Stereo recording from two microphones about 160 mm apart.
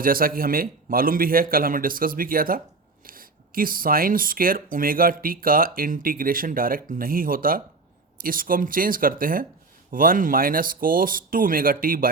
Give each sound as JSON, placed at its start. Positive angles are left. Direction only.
{"t": 0.0, "sound": "speech", "side_deg": -65}